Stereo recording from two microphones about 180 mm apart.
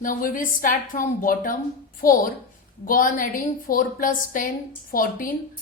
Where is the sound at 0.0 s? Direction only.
50° left (ahead or behind).